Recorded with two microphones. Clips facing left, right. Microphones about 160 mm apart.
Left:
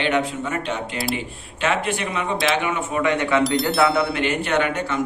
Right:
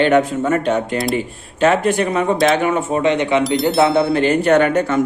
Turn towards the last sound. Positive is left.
turn(degrees=-45)  # may be behind; listen again after turning